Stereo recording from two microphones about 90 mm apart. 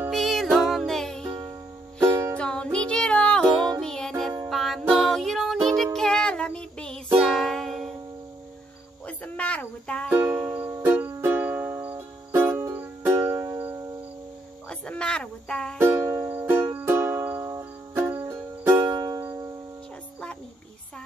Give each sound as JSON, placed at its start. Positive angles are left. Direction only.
{"t": 0.1, "sound": "music", "side_deg": 0}
{"t": 2.0, "sound": "music", "side_deg": -35}
{"t": 2.3, "sound": "music", "side_deg": 10}
{"t": 9.0, "sound": "music", "side_deg": 15}
{"t": 10.1, "sound": "music", "side_deg": -20}
{"t": 14.7, "sound": "music", "side_deg": 10}
{"t": 15.8, "sound": "music", "side_deg": -30}
{"t": 18.9, "sound": "music", "side_deg": -40}